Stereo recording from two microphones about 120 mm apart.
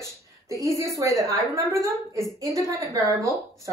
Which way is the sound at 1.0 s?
25° right (ahead or behind).